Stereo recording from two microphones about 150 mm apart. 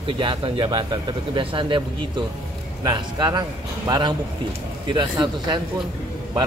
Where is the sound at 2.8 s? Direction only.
25° right (ahead or behind).